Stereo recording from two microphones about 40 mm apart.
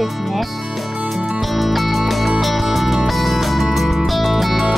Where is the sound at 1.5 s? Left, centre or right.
Centre.